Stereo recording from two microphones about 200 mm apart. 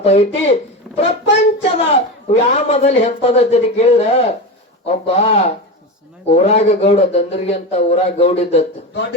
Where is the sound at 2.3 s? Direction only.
35° left (ahead or behind).